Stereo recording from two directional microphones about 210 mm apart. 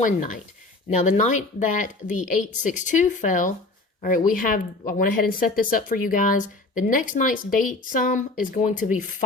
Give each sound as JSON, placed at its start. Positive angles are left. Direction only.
{"t": 0.0, "sound": "speech", "side_deg": 40}